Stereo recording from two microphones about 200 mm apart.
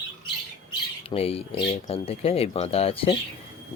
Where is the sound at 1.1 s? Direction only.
30° left (ahead or behind).